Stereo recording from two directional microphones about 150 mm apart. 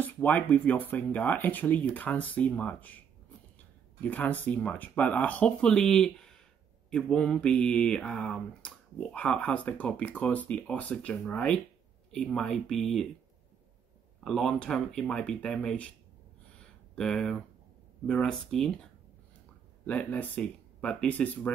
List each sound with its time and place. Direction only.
0.0 s mantra: 10° left (ahead or behind)
4.0 s mantra: 10° left (ahead or behind)
12.1 s speech: 5° left (ahead or behind)
14.2 s speech: centre (ahead or behind)
16.5 s a sound: 5° left (ahead or behind)
18.0 s speech: 5° left (ahead or behind)
19.9 s mantra: 10° left (ahead or behind)